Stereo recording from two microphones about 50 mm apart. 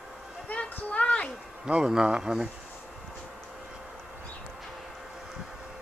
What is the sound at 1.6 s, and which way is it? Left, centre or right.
Speech, centre.